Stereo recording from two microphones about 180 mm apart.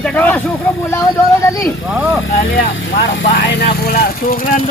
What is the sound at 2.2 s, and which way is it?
Speech, 90° left.